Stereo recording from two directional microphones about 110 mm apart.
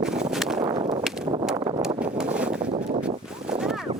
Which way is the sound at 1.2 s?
50° right (ahead or behind).